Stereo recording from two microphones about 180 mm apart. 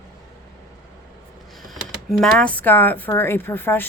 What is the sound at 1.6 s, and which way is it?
Speech, centre (ahead or behind).